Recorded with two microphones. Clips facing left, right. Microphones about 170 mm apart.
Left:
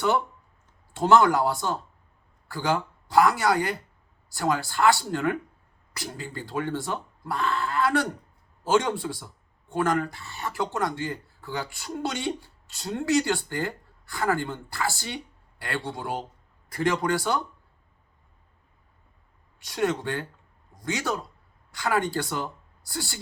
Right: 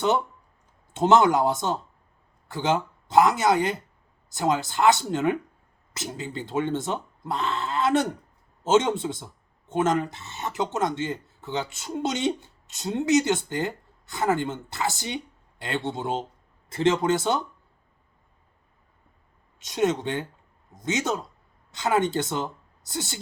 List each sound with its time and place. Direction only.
0.9 s speech: 20° right (ahead or behind)
19.5 s a woman's voice: 20° right (ahead or behind)